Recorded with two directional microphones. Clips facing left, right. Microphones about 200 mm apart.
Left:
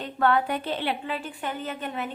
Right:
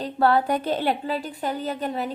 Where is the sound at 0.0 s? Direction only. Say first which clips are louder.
Right 3 dB; 35° right (ahead or behind).